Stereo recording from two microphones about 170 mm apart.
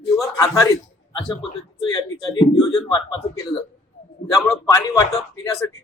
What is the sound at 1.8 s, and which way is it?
A man's voice, 25° left (ahead or behind).